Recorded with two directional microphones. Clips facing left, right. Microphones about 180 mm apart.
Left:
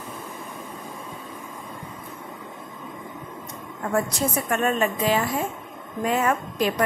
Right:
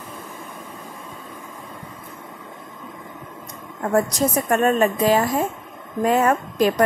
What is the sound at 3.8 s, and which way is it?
A woman's voice, 40° right (ahead or behind).